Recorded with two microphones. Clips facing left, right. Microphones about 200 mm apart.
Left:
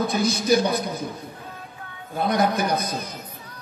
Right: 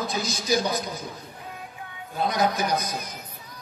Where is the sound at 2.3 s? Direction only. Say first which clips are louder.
Left 3 dB; 60° left (ahead or behind).